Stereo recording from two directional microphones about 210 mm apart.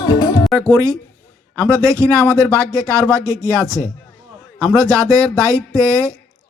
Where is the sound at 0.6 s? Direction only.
15° right (ahead or behind).